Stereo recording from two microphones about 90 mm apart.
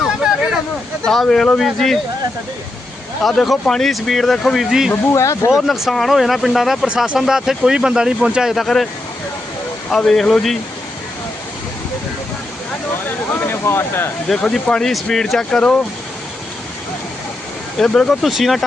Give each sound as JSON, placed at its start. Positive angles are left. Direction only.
{"t": 1.0, "sound": "speech", "side_deg": 5}
{"t": 3.2, "sound": "speech", "side_deg": 0}
{"t": 5.1, "sound": "speech", "side_deg": 35}
{"t": 5.5, "sound": "speech", "side_deg": -5}
{"t": 9.9, "sound": "speech", "side_deg": 5}
{"t": 13.1, "sound": "a sound", "side_deg": 25}
{"t": 14.3, "sound": "speech", "side_deg": 5}
{"t": 17.7, "sound": "speech", "side_deg": 5}